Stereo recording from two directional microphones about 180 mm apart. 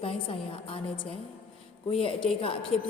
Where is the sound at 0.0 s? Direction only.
30° left (ahead or behind).